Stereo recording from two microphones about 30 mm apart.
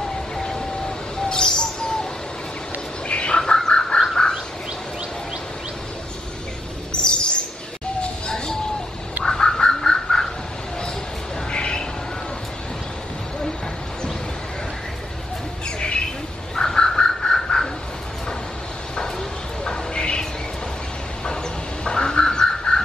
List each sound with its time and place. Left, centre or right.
0.4 s vehicle: centre
1.1 s bird: left
3.1 s bird: left
3.3 s bird: left
4.1 s frog: centre
6.9 s chirp: left
9.2 s bird: centre
11.5 s a sound: left
16.5 s chicken: centre
19.6 s bird: left
21.8 s bird: left